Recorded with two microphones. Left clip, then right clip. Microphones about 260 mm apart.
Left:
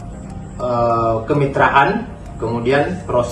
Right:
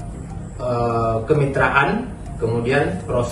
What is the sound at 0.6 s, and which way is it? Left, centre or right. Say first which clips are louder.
A man's voice: left 4 dB; centre.